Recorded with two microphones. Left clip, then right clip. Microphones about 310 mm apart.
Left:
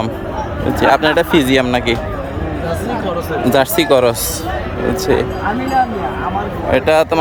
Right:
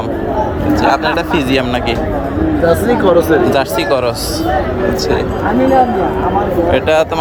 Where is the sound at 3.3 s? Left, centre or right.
Left.